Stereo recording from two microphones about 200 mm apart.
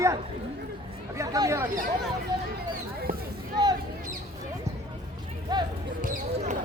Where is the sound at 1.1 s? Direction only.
15° right (ahead or behind).